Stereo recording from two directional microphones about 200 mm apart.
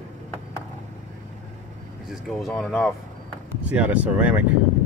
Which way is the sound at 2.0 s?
Centre (ahead or behind).